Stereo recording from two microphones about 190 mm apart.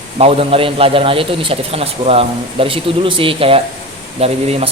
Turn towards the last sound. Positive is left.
turn(degrees=-35)  # may be behind; listen again after turning